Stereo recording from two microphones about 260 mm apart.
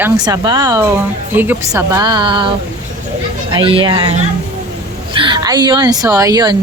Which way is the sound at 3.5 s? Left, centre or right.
Centre.